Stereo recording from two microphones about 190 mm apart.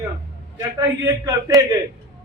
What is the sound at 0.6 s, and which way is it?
A man's voice, 20° right (ahead or behind).